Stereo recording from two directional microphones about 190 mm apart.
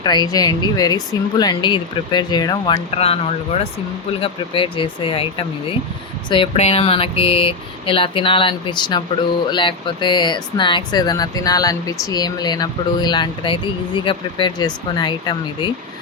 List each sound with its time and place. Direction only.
0.0 s speech: 20° left (ahead or behind)
2.9 s speech: 30° left (ahead or behind)